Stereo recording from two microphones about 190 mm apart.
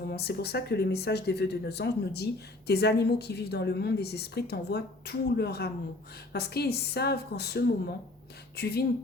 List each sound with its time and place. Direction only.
0.1 s speech: 60° left (ahead or behind)